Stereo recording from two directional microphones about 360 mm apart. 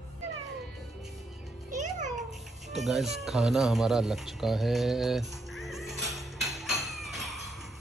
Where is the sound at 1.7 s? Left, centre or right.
Centre.